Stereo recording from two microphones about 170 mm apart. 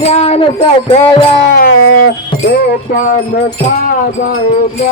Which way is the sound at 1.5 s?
70° left (ahead or behind).